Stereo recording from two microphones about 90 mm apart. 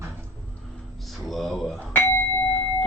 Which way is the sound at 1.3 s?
Centre (ahead or behind).